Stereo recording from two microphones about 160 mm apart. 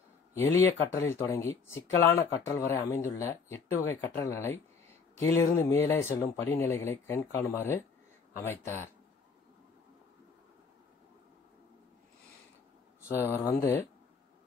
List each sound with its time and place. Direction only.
0.3 s speech: 15° left (ahead or behind)
13.4 s speech: 20° left (ahead or behind)